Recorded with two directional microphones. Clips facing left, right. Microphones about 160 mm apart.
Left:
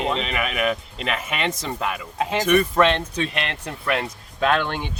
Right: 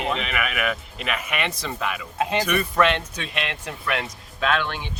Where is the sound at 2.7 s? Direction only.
30° left (ahead or behind).